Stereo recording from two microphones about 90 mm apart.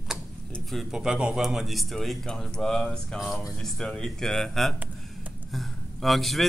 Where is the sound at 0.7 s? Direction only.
5° right (ahead or behind).